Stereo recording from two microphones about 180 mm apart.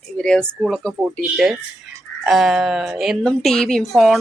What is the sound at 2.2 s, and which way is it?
A woman's voice, centre (ahead or behind).